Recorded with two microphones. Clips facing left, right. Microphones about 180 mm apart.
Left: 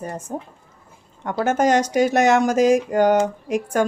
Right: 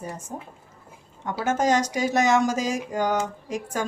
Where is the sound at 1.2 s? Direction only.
60° left (ahead or behind).